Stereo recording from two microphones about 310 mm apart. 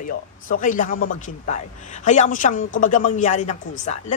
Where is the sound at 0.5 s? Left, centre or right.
Left.